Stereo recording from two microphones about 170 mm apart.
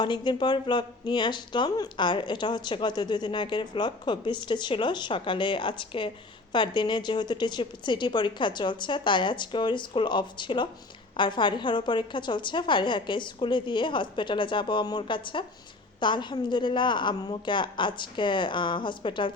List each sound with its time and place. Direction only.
0.0 s speech: 25° left (ahead or behind)